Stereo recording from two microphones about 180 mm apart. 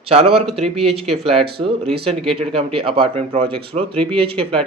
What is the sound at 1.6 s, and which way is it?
Speech, 30° right (ahead or behind).